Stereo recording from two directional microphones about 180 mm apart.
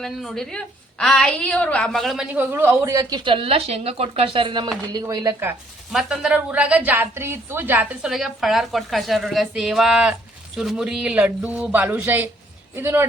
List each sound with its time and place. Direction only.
0.0 s a woman's voice: centre (ahead or behind); by 5.5 s 15° right (ahead or behind)
5.9 s a woman's voice: centre (ahead or behind)